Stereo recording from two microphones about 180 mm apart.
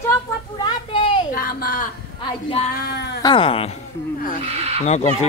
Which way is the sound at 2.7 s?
65° left (ahead or behind).